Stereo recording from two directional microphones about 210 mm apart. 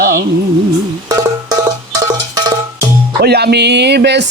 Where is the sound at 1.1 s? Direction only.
15° right (ahead or behind).